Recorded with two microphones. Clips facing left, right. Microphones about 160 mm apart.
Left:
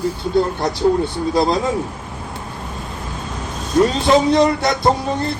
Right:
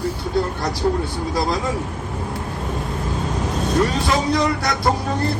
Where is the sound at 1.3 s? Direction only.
25° left (ahead or behind).